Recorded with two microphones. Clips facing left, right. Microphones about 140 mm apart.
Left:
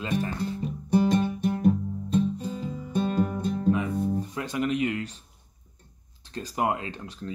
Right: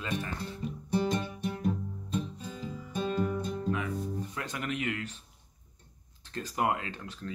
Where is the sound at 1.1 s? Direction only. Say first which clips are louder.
Left 8 dB; 55° left (ahead or behind).